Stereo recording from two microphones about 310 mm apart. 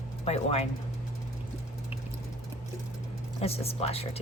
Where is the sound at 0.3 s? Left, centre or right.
Centre.